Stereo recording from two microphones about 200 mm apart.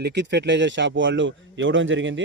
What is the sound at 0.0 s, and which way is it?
Speech, 60° right (ahead or behind).